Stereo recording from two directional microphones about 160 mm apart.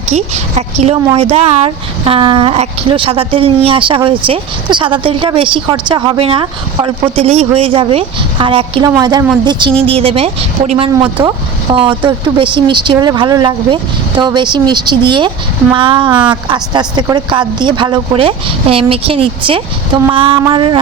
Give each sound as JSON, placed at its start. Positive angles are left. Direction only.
{"t": 0.1, "sound": "speech", "side_deg": -45}
{"t": 11.2, "sound": "speech", "side_deg": -30}